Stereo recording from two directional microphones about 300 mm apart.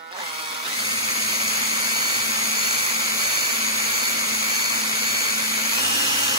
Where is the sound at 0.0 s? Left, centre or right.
Centre.